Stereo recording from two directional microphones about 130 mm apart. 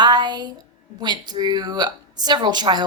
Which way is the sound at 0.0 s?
35° right (ahead or behind).